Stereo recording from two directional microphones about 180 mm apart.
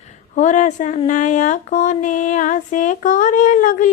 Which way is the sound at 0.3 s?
45° left (ahead or behind).